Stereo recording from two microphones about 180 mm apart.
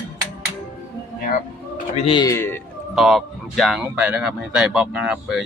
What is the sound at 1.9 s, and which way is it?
Speech, 30° left (ahead or behind).